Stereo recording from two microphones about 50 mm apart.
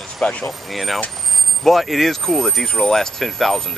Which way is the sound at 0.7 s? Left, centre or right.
Centre.